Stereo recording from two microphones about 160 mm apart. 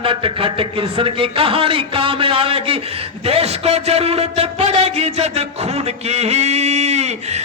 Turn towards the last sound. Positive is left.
turn(degrees=-45)  # may be behind; listen again after turning